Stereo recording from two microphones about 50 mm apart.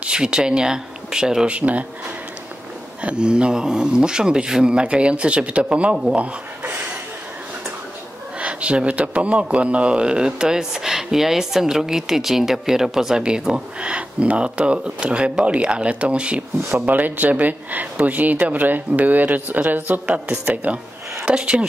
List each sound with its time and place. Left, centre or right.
0.0 s speech: centre
1.5 s speech: right
3.0 s speech: right
8.4 s a man's voice: right
16.8 s speech: right; by 21.6 s centre